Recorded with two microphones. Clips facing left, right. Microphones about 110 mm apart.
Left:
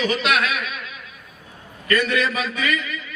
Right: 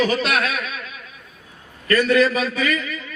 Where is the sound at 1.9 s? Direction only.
35° right (ahead or behind).